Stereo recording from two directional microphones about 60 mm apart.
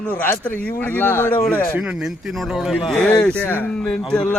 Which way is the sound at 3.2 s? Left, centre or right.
Left.